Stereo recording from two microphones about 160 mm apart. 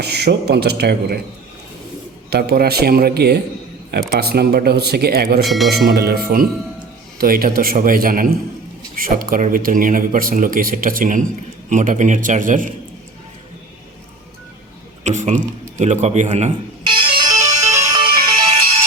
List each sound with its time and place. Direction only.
0.0 s speech: 90° right
2.3 s speech: 85° right; by 12.7 s 55° right (ahead or behind)
15.0 s a sound: 45° right (ahead or behind)
15.8 s speech: 45° right (ahead or behind)
16.8 s music: 30° right (ahead or behind)